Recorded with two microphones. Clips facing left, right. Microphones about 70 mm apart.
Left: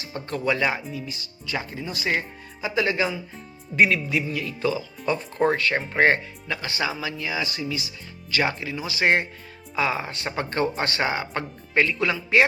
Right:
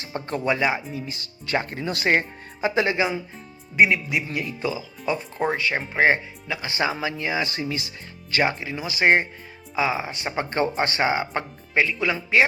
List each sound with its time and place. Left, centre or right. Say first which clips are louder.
0.0 s speech: right 1 dB; right
1.2 s speech: right 9 dB; right
2.0 s speech: right 5 dB; right
2.8 s speech: left 3 dB; right
3.8 s speech: even; centre
6.7 s speech: right 4 dB; right
8.4 s speech: right 2 dB; right
9.7 s speech: right 1 dB; centre
11.7 s speech: even; centre